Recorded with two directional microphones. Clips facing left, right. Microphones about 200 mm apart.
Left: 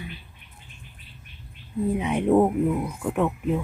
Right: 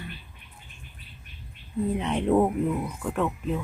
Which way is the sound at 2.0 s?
10° left (ahead or behind).